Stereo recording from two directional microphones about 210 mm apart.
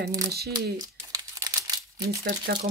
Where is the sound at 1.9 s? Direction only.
50° right (ahead or behind).